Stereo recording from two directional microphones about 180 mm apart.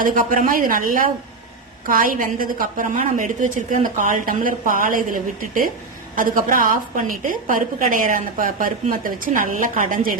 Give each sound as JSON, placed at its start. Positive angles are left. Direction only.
{"t": 0.0, "sound": "a woman's voice", "side_deg": -50}